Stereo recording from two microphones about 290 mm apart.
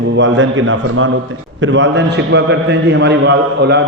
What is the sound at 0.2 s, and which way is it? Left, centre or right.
A man's voice, right.